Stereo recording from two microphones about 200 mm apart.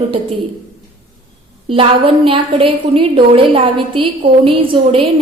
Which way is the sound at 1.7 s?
25° right (ahead or behind).